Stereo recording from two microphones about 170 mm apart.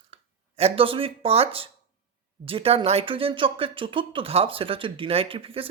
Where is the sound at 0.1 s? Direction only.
35° right (ahead or behind).